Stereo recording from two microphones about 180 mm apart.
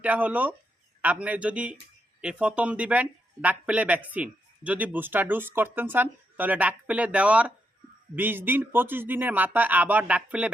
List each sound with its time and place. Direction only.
0.0 s speech: 10° right (ahead or behind)